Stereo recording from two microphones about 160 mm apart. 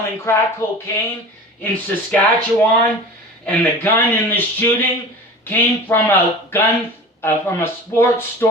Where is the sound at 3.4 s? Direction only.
10° left (ahead or behind).